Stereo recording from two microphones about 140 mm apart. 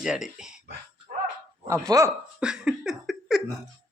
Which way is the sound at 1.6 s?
20° right (ahead or behind).